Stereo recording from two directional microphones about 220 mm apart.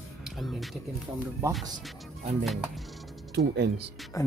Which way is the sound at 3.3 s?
50° right (ahead or behind).